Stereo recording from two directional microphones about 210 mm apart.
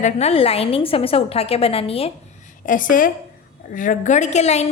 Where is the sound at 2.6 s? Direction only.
40° left (ahead or behind).